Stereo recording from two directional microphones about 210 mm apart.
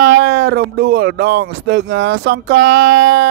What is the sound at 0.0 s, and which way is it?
Speech, 45° right (ahead or behind).